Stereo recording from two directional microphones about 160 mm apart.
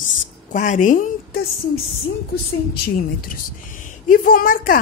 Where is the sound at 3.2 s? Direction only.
60° left (ahead or behind).